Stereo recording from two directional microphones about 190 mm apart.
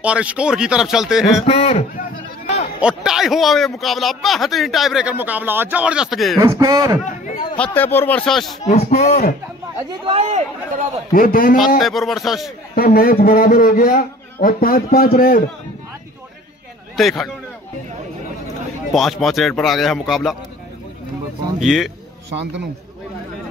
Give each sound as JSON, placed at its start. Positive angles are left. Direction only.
{"t": 0.0, "sound": "a man's voice", "side_deg": -5}
{"t": 1.4, "sound": "a sound", "side_deg": 35}
{"t": 2.8, "sound": "a man's voice", "side_deg": -5}
{"t": 6.4, "sound": "speech", "side_deg": -15}
{"t": 7.1, "sound": "a sound", "side_deg": 40}
{"t": 7.5, "sound": "speech", "side_deg": 10}
{"t": 8.6, "sound": "speech", "side_deg": 35}
{"t": 9.8, "sound": "a man's voice", "side_deg": -25}
{"t": 11.1, "sound": "a man's voice", "side_deg": 50}
{"t": 11.8, "sound": "a man's voice", "side_deg": 0}
{"t": 12.7, "sound": "a man's voice", "side_deg": 50}
{"t": 17.0, "sound": "a man's voice", "side_deg": 0}
{"t": 18.9, "sound": "a man's voice", "side_deg": 0}
{"t": 21.5, "sound": "a man's voice", "side_deg": 0}